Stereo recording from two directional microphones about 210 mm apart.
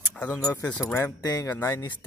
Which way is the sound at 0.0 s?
5° left (ahead or behind).